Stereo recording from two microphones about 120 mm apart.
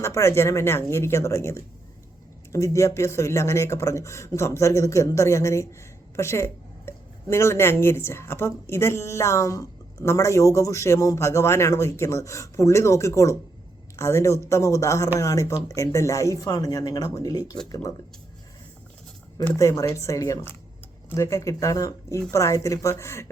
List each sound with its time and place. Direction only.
0.0 s speech: 25° left (ahead or behind)
19.5 s speech: 25° left (ahead or behind)